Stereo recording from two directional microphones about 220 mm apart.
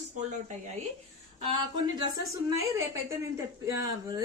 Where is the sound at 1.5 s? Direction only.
20° right (ahead or behind).